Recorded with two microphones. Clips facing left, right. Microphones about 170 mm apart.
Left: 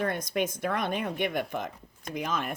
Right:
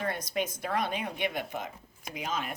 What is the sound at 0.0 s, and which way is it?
Speech, 50° left (ahead or behind).